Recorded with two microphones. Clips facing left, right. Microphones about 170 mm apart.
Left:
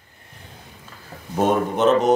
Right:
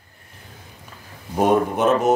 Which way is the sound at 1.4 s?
10° right (ahead or behind).